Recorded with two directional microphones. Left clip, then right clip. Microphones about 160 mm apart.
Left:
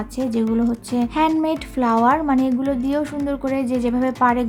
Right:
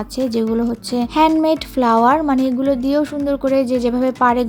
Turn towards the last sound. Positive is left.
turn(degrees=-25)  # may be behind; listen again after turning